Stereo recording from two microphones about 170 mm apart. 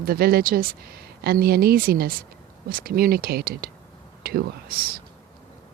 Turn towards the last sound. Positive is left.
turn(degrees=-60)  # may be behind; listen again after turning